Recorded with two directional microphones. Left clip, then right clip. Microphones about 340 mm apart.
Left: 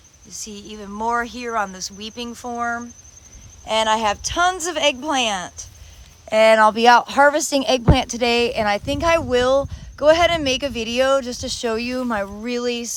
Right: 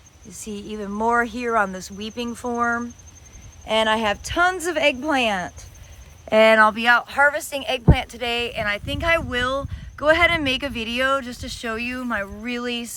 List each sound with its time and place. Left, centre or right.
0.3 s a woman's voice: centre